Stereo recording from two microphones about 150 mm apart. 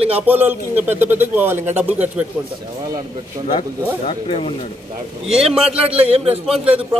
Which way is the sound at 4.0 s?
40° left (ahead or behind).